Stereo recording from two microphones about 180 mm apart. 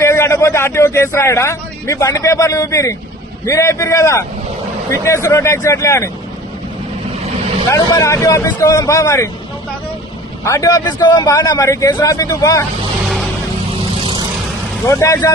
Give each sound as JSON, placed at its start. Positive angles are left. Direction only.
{"t": 0.0, "sound": "a man's voice", "side_deg": 15}
{"t": 7.7, "sound": "speech", "side_deg": 15}
{"t": 10.4, "sound": "a man's voice", "side_deg": 20}
{"t": 14.0, "sound": "vehicle", "side_deg": -30}
{"t": 14.8, "sound": "speech", "side_deg": 15}